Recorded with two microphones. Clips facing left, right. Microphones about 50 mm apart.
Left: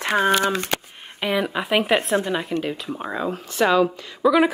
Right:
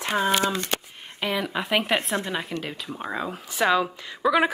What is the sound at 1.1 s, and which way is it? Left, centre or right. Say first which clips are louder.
Speech: left 4 dB; centre.